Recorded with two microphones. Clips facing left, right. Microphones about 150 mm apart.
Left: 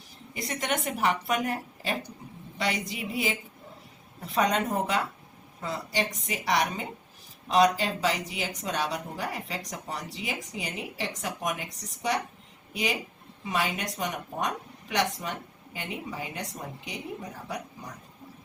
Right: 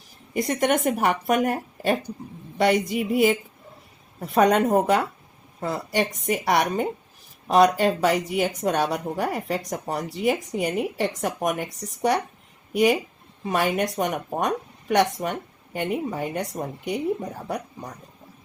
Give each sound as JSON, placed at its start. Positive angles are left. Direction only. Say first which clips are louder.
{"t": 0.3, "sound": "a woman's voice", "louder": "right 9 dB", "side_deg": -50}